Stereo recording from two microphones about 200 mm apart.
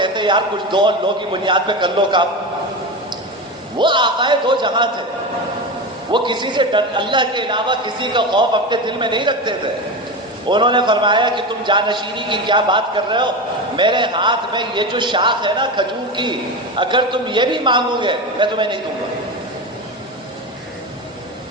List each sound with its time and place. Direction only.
0.0 s a man's voice: 25° right (ahead or behind)
3.8 s a man's voice: 25° right (ahead or behind)
6.1 s a man's voice: 25° right (ahead or behind)